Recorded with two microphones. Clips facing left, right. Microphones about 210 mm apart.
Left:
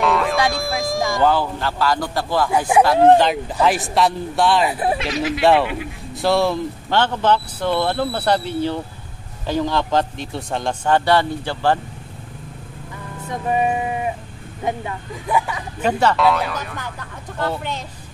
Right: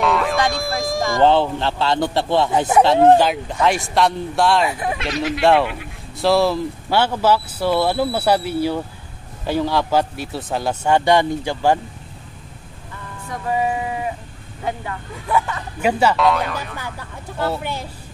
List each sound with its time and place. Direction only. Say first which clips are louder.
0.0 s a sound: even; centre (ahead or behind)
1.2 s a man's voice: right 5 dB; 25° right (ahead or behind)
3.1 s speech: even; centre (ahead or behind)
4.6 s speech: left 2 dB; 35° left (ahead or behind)
4.9 s speech: left 1 dB; centre (ahead or behind)
13.3 s music: left 1 dB; 20° left (ahead or behind)
14.6 s speech: left 2 dB; 20° left (ahead or behind)
15.8 s speech: even; 10° right (ahead or behind)